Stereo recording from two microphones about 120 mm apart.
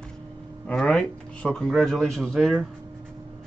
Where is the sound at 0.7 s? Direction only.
5° left (ahead or behind).